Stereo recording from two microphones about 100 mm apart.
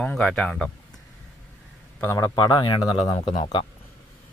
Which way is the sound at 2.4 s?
45° left (ahead or behind).